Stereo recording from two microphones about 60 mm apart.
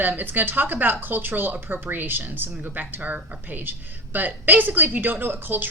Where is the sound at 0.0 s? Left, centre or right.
Right.